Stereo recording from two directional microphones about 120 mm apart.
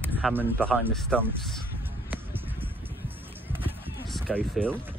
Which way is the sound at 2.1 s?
15° right (ahead or behind).